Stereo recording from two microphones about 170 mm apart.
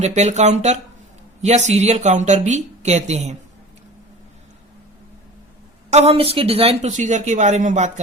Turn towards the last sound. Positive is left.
turn(degrees=-45)  # may be behind; listen again after turning